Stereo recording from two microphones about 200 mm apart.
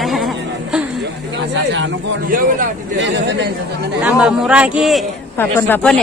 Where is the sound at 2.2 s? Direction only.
45° right (ahead or behind).